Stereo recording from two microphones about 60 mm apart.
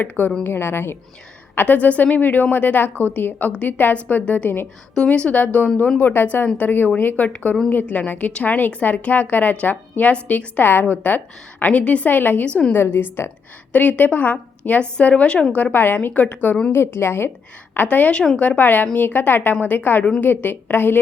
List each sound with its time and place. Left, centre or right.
0.0 s a woman's voice: left
1.5 s a woman's voice: left
4.9 s a woman's voice: centre; by 13.3 s left
13.7 s a woman's voice: left
15.7 s a woman's voice: left
16.7 s a woman's voice: left
17.8 s a woman's voice: left